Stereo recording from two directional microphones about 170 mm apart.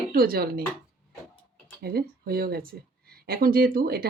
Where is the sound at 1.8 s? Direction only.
65° right (ahead or behind).